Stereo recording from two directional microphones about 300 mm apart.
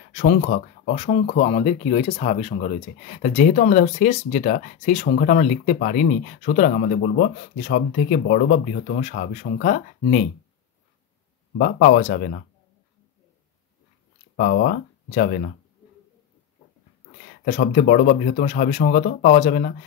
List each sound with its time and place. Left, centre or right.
0.1 s speech: left
11.5 s speech: left
14.3 s speech: left
17.5 s speech: left